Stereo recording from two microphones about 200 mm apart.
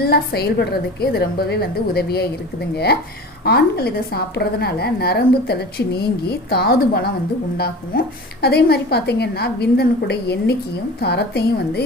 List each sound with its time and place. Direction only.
0.0 s a woman's voice: 50° left (ahead or behind)